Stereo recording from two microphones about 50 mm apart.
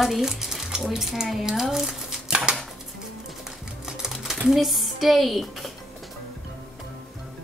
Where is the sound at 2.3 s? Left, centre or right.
Centre.